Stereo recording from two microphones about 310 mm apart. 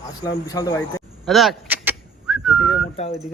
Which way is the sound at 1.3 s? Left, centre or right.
Centre.